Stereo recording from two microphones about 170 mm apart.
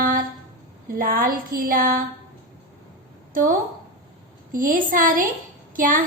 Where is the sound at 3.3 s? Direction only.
55° right (ahead or behind).